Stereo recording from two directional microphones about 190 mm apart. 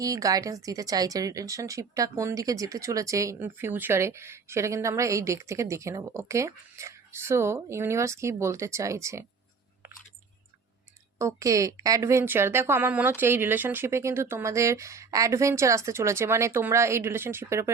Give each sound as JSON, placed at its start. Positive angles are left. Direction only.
{"t": 0.0, "sound": "speech", "side_deg": -20}
{"t": 11.2, "sound": "speech", "side_deg": -15}